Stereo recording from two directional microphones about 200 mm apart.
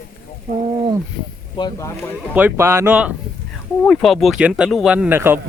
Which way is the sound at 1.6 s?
20° left (ahead or behind).